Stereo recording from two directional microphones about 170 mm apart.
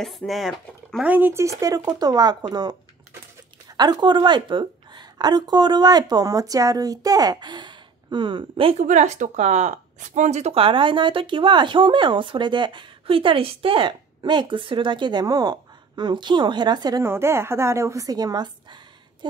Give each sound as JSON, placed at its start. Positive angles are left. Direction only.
{"t": 0.0, "sound": "speech", "side_deg": 0}
{"t": 1.1, "sound": "speech", "side_deg": -15}
{"t": 3.7, "sound": "speech", "side_deg": -25}
{"t": 8.8, "sound": "speech", "side_deg": -45}